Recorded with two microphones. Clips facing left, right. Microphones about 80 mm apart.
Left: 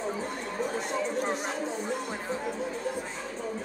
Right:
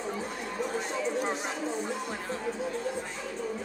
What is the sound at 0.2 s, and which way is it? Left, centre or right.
Chatter, left.